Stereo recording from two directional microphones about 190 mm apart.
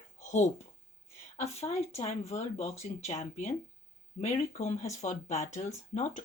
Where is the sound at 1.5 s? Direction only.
35° left (ahead or behind).